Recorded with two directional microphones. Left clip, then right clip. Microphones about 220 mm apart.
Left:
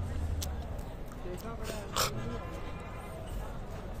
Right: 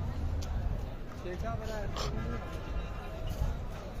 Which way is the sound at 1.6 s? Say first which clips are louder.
Left 4 dB; 30° left (ahead or behind).